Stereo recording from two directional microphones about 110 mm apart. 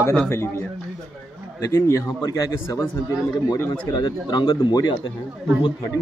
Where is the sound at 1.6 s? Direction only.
30° left (ahead or behind).